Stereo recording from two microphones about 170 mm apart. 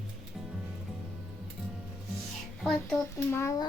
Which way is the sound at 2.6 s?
Centre (ahead or behind).